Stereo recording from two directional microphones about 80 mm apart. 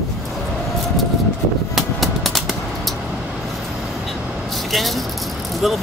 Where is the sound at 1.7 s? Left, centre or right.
Centre.